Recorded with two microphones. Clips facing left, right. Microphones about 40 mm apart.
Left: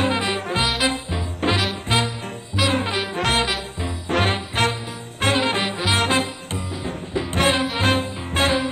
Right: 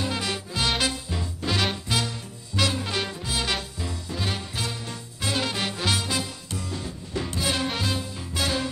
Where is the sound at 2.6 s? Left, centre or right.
Centre.